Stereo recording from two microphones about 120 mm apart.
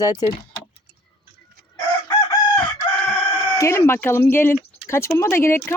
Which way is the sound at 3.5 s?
25° left (ahead or behind).